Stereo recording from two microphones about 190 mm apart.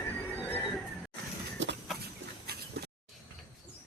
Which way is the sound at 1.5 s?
65° right (ahead or behind).